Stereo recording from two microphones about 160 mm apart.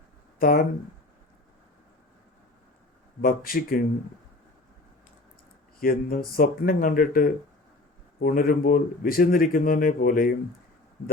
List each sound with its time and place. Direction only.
0.3 s speech: 65° left (ahead or behind)
3.2 s speech: 65° left (ahead or behind)
5.8 s speech: 65° left (ahead or behind)